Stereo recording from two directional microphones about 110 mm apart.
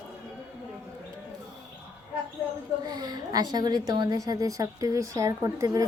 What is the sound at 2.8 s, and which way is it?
A woman's voice, 40° right (ahead or behind).